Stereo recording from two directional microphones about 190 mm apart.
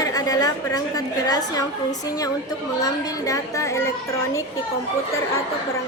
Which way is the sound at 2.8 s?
20° left (ahead or behind).